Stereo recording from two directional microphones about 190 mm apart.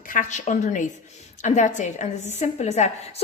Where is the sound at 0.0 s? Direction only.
45° left (ahead or behind).